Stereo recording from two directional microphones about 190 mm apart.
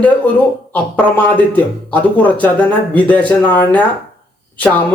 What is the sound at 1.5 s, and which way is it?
Speech, 10° left (ahead or behind).